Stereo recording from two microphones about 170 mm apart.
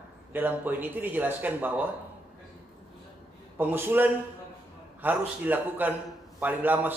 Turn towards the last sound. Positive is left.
turn(degrees=-10)  # may be behind; listen again after turning